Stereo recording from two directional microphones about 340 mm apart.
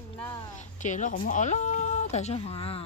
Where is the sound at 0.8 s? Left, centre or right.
Left.